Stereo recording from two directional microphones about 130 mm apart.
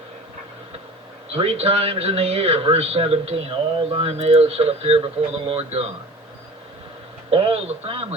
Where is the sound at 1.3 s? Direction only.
50° right (ahead or behind).